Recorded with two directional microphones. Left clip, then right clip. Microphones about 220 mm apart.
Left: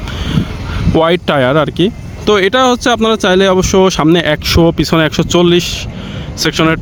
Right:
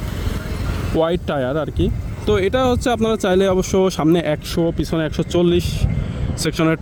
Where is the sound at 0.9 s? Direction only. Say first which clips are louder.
Left 8 dB; 15° left (ahead or behind).